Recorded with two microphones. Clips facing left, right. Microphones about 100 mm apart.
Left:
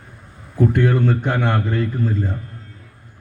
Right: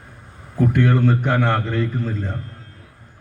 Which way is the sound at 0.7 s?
10° left (ahead or behind).